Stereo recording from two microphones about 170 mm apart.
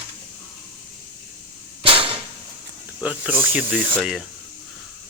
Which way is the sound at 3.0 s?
10° right (ahead or behind).